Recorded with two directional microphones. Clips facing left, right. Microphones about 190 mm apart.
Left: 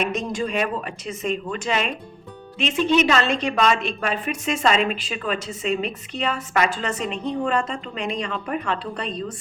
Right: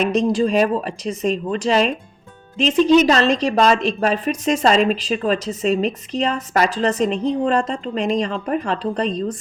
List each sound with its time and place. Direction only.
0.0 s a woman's voice: 35° right (ahead or behind)